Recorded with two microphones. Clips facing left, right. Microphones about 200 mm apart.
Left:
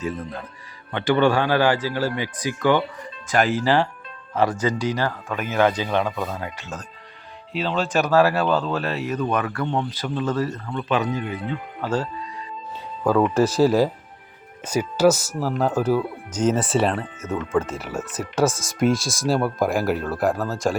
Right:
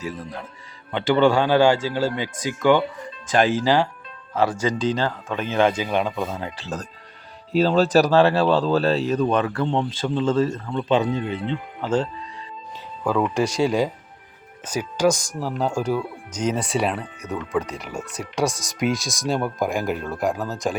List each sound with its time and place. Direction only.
0.9 s speech: 20° right (ahead or behind)
4.8 s speech: 20° right (ahead or behind)
5.8 s speech: 15° right (ahead or behind)
13.6 s speech: 5° left (ahead or behind)
18.4 s speech: 15° right (ahead or behind)
18.8 s speech: centre (ahead or behind)
20.4 s speech: 20° right (ahead or behind)